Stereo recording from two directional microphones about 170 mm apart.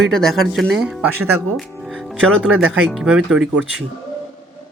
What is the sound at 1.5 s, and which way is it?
Music, centre (ahead or behind).